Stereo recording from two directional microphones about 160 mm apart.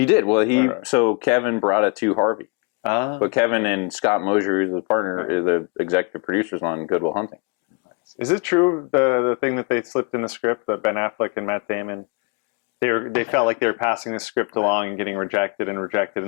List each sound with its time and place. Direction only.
0.0 s speech: 10° left (ahead or behind)
8.4 s speech: 15° left (ahead or behind)